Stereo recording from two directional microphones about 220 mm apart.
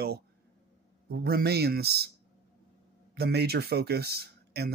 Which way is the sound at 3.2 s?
45° right (ahead or behind).